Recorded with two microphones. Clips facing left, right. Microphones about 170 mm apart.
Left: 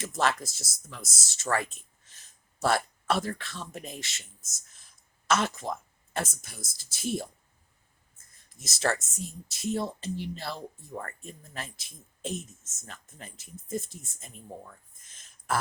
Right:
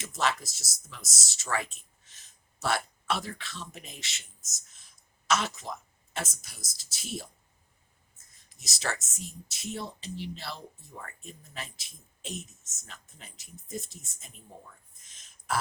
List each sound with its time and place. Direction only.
0.0 s speech: 55° left (ahead or behind)
8.4 s speech: 50° left (ahead or behind)
14.7 s a sound: 50° left (ahead or behind)